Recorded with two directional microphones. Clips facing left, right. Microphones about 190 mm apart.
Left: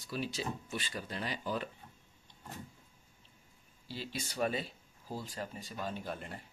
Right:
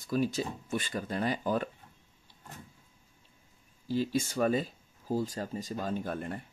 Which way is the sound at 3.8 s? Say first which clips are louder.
Right 12 dB; 45° right (ahead or behind).